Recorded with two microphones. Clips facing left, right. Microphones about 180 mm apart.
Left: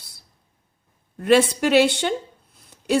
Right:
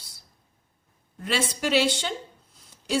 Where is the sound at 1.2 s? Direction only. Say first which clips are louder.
Left 11 dB; 60° left (ahead or behind).